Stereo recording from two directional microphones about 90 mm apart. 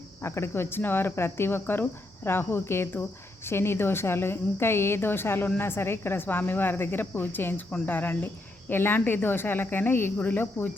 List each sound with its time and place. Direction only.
0.2 s speech: 30° left (ahead or behind)